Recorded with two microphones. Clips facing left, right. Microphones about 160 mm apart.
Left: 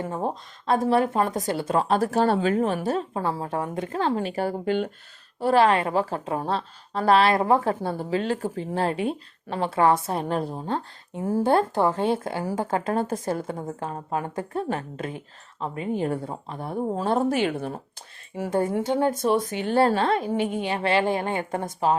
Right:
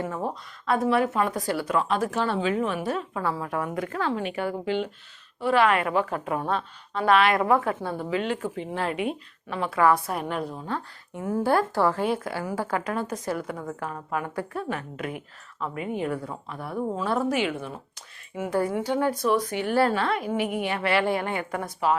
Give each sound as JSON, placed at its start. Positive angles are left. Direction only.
{"t": 0.1, "sound": "a woman's voice", "side_deg": 25}
{"t": 1.4, "sound": "a woman's voice", "side_deg": 20}
{"t": 5.4, "sound": "a woman's voice", "side_deg": 35}
{"t": 18.8, "sound": "a woman's voice", "side_deg": 25}